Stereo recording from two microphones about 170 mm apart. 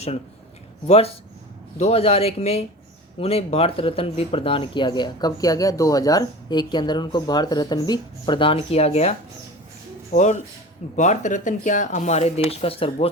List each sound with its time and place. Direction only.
0.9 s speech: 35° left (ahead or behind)